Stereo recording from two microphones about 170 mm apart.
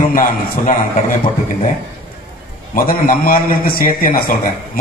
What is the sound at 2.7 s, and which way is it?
A man's voice, 55° left (ahead or behind).